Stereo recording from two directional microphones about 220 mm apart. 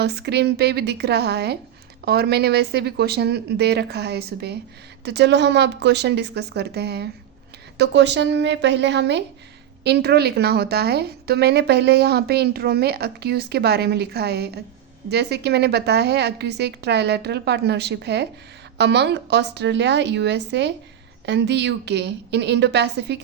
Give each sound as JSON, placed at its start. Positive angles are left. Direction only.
{"t": 0.0, "sound": "a woman's voice", "side_deg": -50}